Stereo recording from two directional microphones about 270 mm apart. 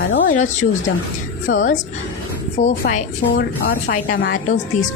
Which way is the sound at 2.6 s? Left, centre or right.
Left.